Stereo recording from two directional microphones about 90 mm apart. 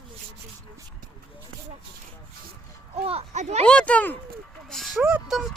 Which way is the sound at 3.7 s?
10° left (ahead or behind).